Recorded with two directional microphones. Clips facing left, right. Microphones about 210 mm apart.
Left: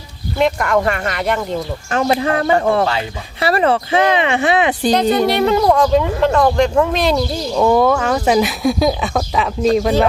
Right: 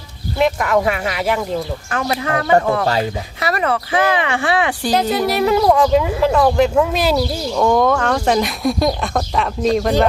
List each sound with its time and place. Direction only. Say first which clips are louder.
0.3 s speech: even; centre (ahead or behind)
2.1 s speech: even; 30° left (ahead or behind)
2.8 s speech: right 1 dB; 40° right (ahead or behind)
3.4 s speech: left 5 dB; 30° left (ahead or behind)
4.9 s speech: left 3 dB; 5° right (ahead or behind)
7.5 s speech: left 2 dB; 5° left (ahead or behind)